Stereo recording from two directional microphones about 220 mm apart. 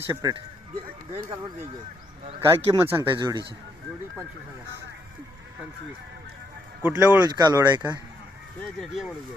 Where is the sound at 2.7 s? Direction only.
10° right (ahead or behind).